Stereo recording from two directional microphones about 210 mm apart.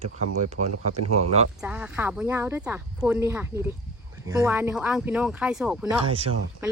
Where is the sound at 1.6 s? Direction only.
5° right (ahead or behind).